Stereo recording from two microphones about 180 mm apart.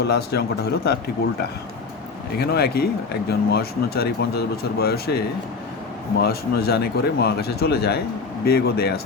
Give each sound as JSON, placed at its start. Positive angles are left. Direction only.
{"t": 0.0, "sound": "speech", "side_deg": 65}
{"t": 2.4, "sound": "speech", "side_deg": 60}